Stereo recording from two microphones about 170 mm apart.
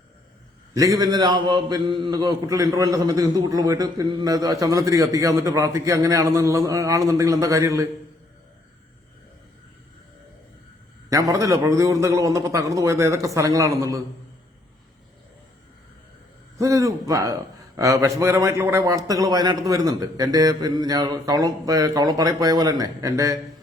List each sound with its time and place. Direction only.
0.7 s a man's voice: 20° right (ahead or behind)
11.1 s a man's voice: 20° right (ahead or behind)
16.6 s a man's voice: 20° right (ahead or behind)